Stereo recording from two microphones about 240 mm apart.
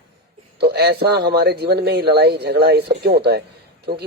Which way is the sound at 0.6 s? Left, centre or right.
Right.